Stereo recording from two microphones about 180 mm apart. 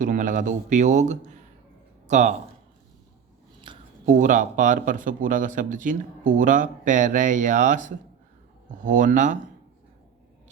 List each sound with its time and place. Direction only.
0.0 s speech: 45° right (ahead or behind)
3.7 s a sound: 25° right (ahead or behind)
4.0 s speech: 45° right (ahead or behind)